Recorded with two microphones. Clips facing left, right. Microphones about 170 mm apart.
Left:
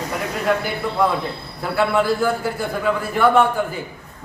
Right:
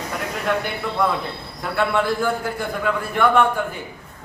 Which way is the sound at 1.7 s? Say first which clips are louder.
Left 2 dB; 5° left (ahead or behind).